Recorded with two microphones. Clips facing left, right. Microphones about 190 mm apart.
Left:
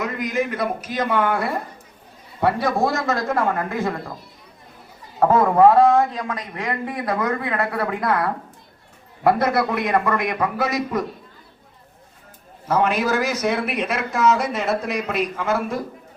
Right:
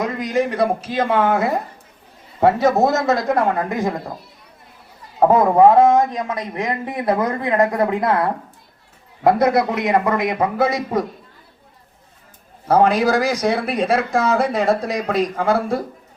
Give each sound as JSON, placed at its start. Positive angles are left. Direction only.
{"t": 0.0, "sound": "a man's voice", "side_deg": -30}
{"t": 5.2, "sound": "a man's voice", "side_deg": -15}
{"t": 12.6, "sound": "speech", "side_deg": -35}